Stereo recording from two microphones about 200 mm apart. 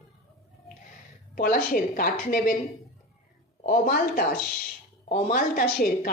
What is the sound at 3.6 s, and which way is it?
A woman's voice, 45° left (ahead or behind).